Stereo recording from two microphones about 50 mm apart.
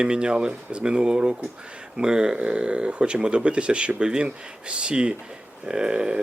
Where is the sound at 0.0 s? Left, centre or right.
Centre.